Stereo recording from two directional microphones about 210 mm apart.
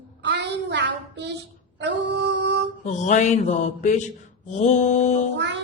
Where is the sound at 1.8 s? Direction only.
55° right (ahead or behind).